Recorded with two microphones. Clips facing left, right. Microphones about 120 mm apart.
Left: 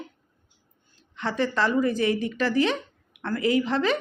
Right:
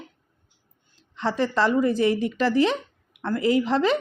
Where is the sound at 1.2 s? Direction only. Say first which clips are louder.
Right 2 dB; 25° right (ahead or behind).